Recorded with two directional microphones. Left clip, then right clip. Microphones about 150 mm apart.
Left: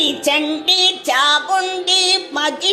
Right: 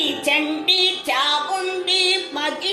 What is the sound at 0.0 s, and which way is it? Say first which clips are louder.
Music: left 3 dB; 40° left (ahead or behind).